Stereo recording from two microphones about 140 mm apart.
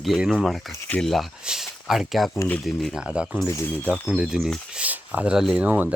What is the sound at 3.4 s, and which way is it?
Speech, 20° left (ahead or behind).